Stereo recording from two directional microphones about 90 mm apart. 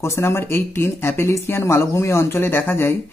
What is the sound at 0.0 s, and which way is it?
Speech, 30° left (ahead or behind).